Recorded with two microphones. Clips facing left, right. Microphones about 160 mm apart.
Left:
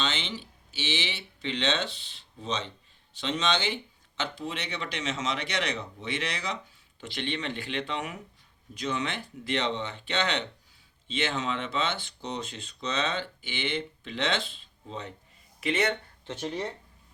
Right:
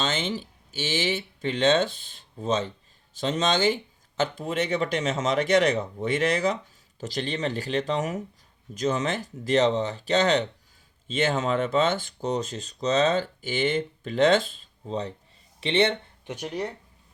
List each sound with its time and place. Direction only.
0.0 s speech: 45° right (ahead or behind); by 16.0 s 30° right (ahead or behind)
16.2 s speech: 10° right (ahead or behind)